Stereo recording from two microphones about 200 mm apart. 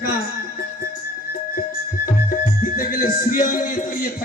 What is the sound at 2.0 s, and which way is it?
Music, 45° left (ahead or behind).